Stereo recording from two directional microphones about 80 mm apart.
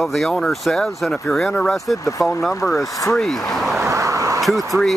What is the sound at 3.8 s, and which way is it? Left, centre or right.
Vehicle, right.